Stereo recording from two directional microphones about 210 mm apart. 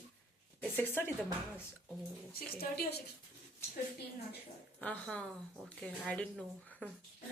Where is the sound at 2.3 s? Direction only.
45° left (ahead or behind).